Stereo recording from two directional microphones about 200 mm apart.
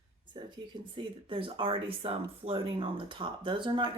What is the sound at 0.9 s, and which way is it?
Speech, 25° right (ahead or behind).